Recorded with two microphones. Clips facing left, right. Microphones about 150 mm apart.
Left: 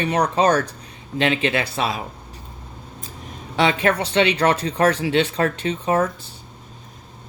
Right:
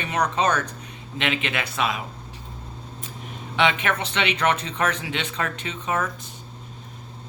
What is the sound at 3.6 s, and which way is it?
Speech, 35° left (ahead or behind).